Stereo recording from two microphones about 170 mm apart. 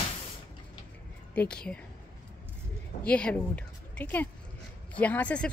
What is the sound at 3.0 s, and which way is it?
A woman's voice, 5° left (ahead or behind).